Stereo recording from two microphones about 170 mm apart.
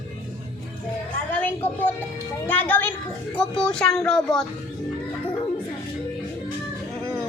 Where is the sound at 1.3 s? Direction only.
10° left (ahead or behind).